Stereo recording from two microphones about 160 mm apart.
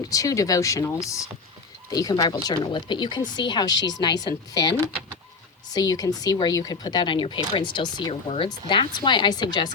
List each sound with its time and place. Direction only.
0.0 s speech: 20° left (ahead or behind)